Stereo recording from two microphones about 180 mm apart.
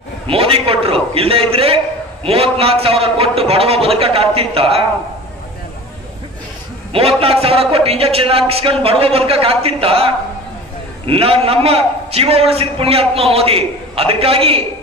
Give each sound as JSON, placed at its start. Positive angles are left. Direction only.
{"t": 0.3, "sound": "a man's voice", "side_deg": -30}
{"t": 6.9, "sound": "a man's voice", "side_deg": -35}